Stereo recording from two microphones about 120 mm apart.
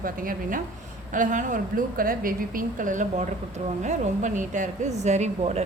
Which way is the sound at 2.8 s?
90° right.